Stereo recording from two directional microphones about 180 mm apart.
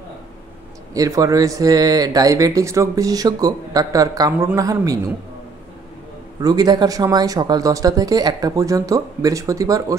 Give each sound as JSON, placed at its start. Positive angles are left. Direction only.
{"t": 0.9, "sound": "speech", "side_deg": -20}
{"t": 6.4, "sound": "speech", "side_deg": -20}